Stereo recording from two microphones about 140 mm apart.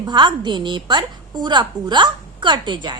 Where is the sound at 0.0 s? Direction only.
30° right (ahead or behind).